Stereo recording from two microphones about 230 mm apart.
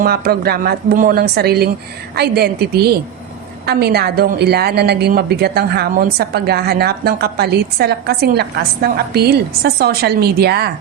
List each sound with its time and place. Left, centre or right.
0.0 s a woman's voice: right